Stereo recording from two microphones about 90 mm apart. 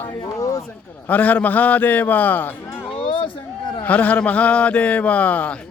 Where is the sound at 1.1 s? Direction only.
15° left (ahead or behind).